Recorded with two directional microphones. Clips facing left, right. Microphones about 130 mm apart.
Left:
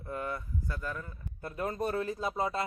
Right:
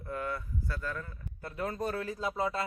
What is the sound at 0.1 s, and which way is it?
Speech, 20° left (ahead or behind).